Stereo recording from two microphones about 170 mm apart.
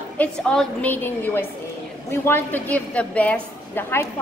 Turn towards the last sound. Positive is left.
turn(degrees=15)  # may be behind; listen again after turning